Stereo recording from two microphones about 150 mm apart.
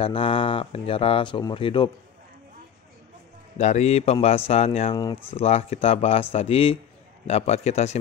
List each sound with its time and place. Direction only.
0.0 s speech: 35° left (ahead or behind)
3.5 s a man's voice: 50° left (ahead or behind)